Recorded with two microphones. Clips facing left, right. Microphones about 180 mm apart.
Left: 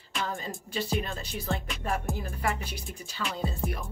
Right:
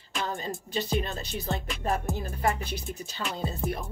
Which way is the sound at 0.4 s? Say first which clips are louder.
Right 2 dB; 25° right (ahead or behind).